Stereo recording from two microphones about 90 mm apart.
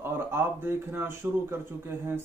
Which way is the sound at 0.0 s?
25° right (ahead or behind).